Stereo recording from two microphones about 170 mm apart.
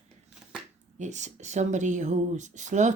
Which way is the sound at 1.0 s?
45° right (ahead or behind).